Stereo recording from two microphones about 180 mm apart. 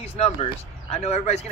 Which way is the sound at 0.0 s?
35° left (ahead or behind).